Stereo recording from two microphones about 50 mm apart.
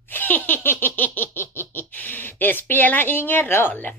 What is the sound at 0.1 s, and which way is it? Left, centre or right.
Laughter, left.